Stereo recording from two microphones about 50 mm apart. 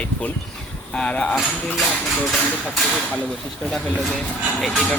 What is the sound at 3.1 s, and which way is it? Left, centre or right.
Speech, left.